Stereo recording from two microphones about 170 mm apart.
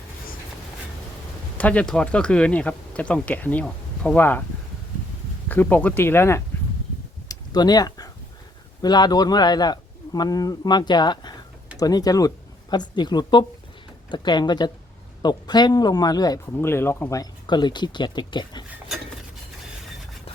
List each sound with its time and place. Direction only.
1.5 s speech: 10° left (ahead or behind)
5.5 s speech: 10° left (ahead or behind)
7.3 s a sound: 25° left (ahead or behind)
8.8 s speech: 25° left (ahead or behind)